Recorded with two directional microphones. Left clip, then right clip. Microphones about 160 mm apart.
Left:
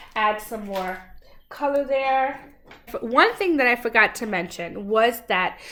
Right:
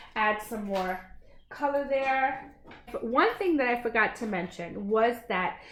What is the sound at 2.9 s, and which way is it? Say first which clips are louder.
Speech: left 7 dB; 25° left (ahead or behind).